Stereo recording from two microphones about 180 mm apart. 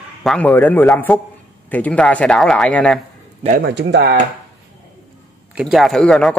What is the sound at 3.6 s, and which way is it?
Speech, 70° right (ahead or behind).